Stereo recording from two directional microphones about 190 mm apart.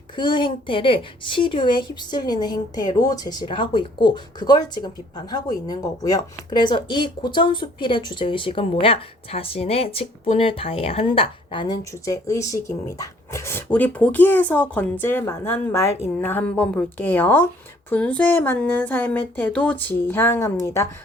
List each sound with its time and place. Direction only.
0.2 s speech: 25° left (ahead or behind)